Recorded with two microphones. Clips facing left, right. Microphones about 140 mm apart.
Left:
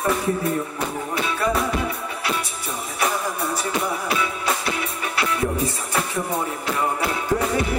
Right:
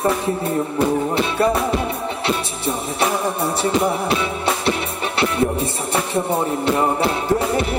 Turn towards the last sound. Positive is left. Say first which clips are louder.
# right 4 dB
turn(degrees=-30)  # may be behind; listen again after turning